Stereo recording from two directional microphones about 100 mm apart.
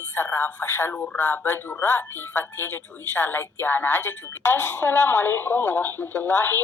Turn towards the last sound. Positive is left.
turn(degrees=20)  # may be behind; listen again after turning